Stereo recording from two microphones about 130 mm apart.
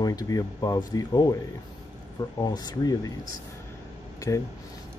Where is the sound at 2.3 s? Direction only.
30° left (ahead or behind).